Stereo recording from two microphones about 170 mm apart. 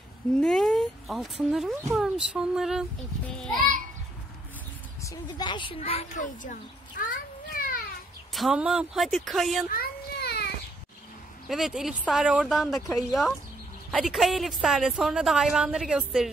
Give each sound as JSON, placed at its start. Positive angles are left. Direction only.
{"t": 0.4, "sound": "a woman's voice", "side_deg": 0}
{"t": 5.0, "sound": "speech", "side_deg": 25}
{"t": 8.3, "sound": "a woman's voice", "side_deg": 0}
{"t": 9.7, "sound": "baby cry", "side_deg": 65}
{"t": 11.4, "sound": "a woman's voice", "side_deg": 0}